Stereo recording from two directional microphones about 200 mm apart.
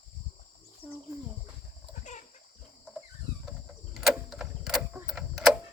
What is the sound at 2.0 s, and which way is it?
Chicken, 40° left (ahead or behind).